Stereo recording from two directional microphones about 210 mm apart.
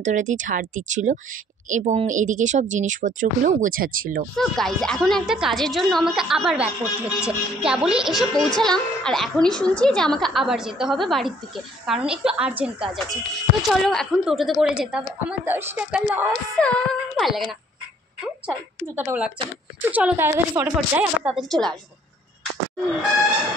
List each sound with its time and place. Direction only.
0.0 s speech: 35° right (ahead or behind)
4.4 s a woman's voice: centre (ahead or behind)
16.5 s a woman's voice: 5° left (ahead or behind)